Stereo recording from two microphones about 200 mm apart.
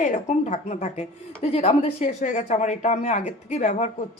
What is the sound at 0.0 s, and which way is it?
A woman's voice, 40° left (ahead or behind).